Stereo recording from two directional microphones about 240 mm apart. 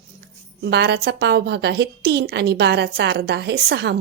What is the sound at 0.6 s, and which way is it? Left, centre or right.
A woman's voice, right.